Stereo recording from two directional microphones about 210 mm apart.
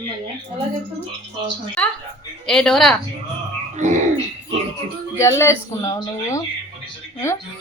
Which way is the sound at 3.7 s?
35° right (ahead or behind).